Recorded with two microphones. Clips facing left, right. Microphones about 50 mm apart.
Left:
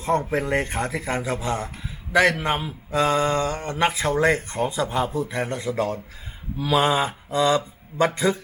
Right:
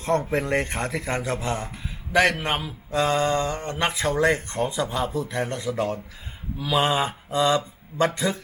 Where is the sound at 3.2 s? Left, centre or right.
Left; by 5.1 s centre.